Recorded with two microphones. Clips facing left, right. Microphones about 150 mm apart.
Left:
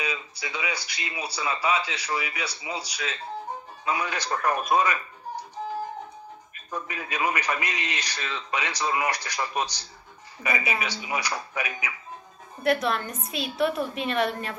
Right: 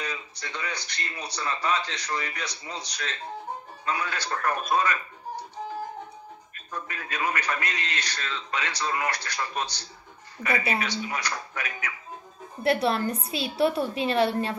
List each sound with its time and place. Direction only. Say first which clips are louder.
0.0 s a man's voice: left 3 dB; 10° left (ahead or behind)
6.5 s a man's voice: left 3 dB; 10° left (ahead or behind)
12.8 s a woman's voice: right 3 dB; 35° right (ahead or behind)